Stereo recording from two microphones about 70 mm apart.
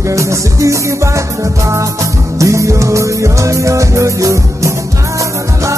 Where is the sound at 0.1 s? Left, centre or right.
Right.